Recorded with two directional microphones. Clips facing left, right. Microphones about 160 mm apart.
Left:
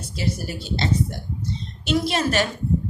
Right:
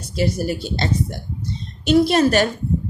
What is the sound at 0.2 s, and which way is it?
Speech, 50° right (ahead or behind).